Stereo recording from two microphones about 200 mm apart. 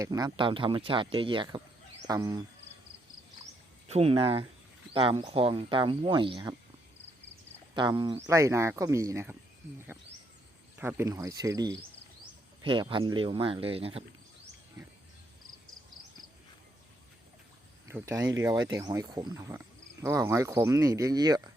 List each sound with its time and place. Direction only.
0.0 s speech: 15° right (ahead or behind)
3.8 s speech: 30° right (ahead or behind)
7.8 s speech: 20° right (ahead or behind)
10.8 s speech: 10° right (ahead or behind); by 14.0 s 30° right (ahead or behind)
17.8 s speech: 15° right (ahead or behind)